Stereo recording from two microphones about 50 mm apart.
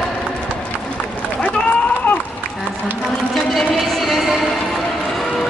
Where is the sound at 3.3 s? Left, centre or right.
Centre.